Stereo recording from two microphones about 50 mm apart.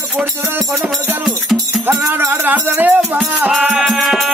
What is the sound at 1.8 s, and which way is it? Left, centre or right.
Music, right.